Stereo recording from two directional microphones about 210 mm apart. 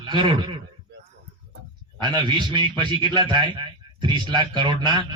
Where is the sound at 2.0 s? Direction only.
20° right (ahead or behind).